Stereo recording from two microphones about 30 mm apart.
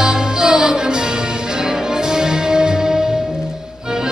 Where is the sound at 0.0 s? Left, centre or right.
Right.